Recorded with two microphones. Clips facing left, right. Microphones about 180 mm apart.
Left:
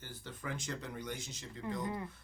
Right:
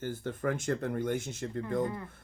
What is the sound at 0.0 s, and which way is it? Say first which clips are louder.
Speech: right 13 dB; 50° right (ahead or behind).